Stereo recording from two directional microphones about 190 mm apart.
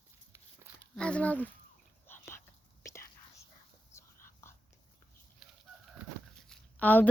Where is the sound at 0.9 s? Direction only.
5° left (ahead or behind).